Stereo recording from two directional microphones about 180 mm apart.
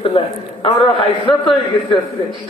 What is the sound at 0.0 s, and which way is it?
A man's voice, 30° left (ahead or behind).